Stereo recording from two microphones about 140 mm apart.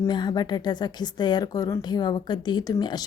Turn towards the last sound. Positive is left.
turn(degrees=30)  # may be behind; listen again after turning